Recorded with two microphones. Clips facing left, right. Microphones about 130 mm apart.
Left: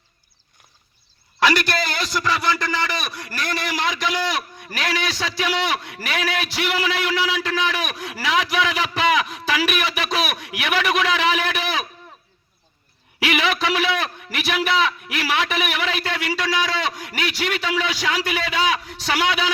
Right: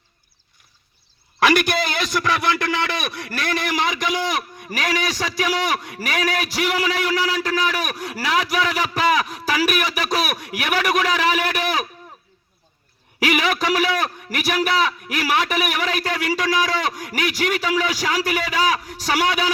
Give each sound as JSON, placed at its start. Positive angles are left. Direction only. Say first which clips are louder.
{"t": 1.5, "sound": "a man's voice", "louder": "right 2 dB", "side_deg": -55}
{"t": 5.1, "sound": "a man's voice", "louder": "right 1 dB", "side_deg": -45}
{"t": 13.1, "sound": "a man's voice", "louder": "right 1 dB", "side_deg": -40}